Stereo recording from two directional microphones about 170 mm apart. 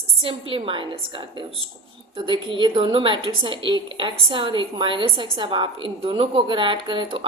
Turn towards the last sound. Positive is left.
turn(degrees=-30)  # may be behind; listen again after turning